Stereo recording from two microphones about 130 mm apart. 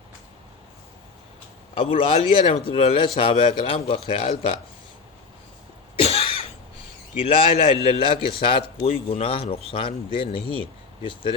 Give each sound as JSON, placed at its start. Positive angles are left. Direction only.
{"t": 1.7, "sound": "a man's voice", "side_deg": 45}
{"t": 6.0, "sound": "cough", "side_deg": 50}
{"t": 7.2, "sound": "a man's voice", "side_deg": 45}